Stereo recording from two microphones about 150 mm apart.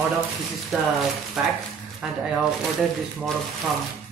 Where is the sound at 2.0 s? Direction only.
5° right (ahead or behind).